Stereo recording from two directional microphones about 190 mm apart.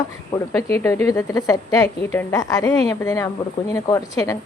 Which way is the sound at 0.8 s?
15° left (ahead or behind).